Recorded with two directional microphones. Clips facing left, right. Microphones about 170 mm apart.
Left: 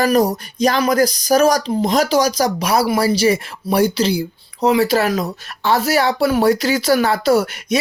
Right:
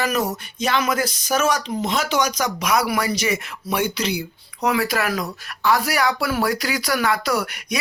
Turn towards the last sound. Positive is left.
turn(degrees=25)  # may be behind; listen again after turning